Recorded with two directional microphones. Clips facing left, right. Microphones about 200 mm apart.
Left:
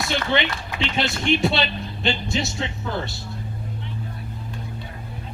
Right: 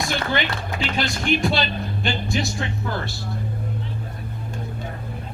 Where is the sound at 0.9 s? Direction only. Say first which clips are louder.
Left 1 dB; 25° left (ahead or behind).